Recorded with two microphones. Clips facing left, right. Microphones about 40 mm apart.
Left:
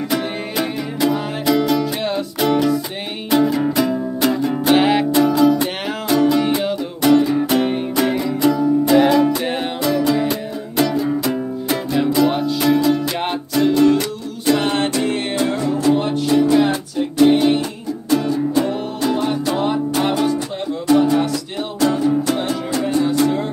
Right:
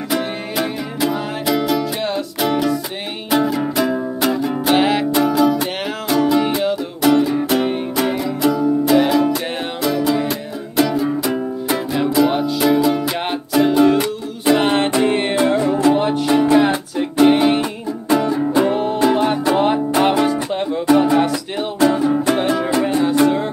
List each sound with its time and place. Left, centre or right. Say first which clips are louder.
0.1 s music: right 4 dB; centre; by 16.0 s right
16.0 s music: right 1 dB; centre